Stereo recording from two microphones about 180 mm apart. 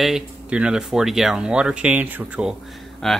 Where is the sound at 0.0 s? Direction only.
5° right (ahead or behind).